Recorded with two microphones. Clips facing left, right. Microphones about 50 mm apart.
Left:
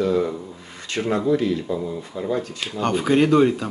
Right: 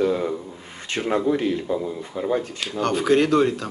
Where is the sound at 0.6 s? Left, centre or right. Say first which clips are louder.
Even; right.